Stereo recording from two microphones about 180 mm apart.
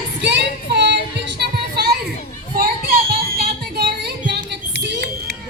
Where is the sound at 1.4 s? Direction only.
60° right (ahead or behind).